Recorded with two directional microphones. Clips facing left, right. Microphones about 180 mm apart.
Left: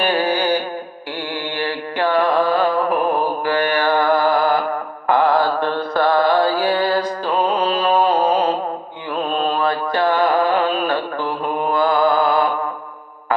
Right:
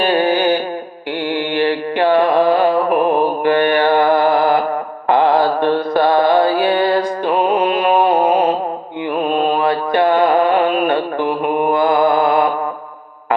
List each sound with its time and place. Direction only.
0.0 s music: 25° right (ahead or behind)
1.5 s mantra: 20° right (ahead or behind)